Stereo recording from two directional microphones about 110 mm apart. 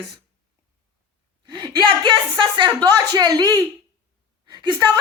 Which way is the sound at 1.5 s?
45° right (ahead or behind).